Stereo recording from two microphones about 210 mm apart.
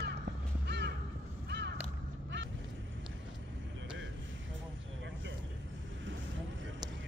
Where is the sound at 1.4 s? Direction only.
55° right (ahead or behind).